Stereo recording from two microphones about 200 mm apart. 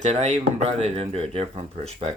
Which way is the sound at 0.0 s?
35° right (ahead or behind).